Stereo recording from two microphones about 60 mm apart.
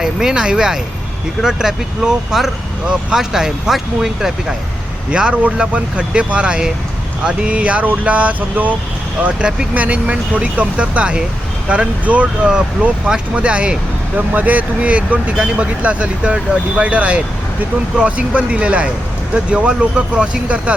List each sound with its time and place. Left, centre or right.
0.0 s speech: centre
5.1 s speech: centre
9.7 s speech: right